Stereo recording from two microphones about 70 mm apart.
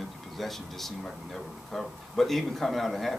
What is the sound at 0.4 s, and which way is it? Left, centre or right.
Speech, centre.